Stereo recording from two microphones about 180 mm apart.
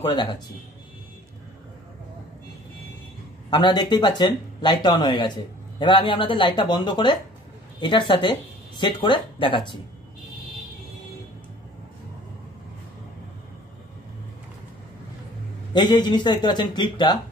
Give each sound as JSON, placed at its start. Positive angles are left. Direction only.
{"t": 0.0, "sound": "speech", "side_deg": 25}
{"t": 3.4, "sound": "speech", "side_deg": 25}
{"t": 15.7, "sound": "speech", "side_deg": 25}